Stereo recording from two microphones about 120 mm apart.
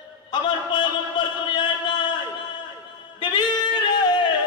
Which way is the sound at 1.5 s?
40° left (ahead or behind).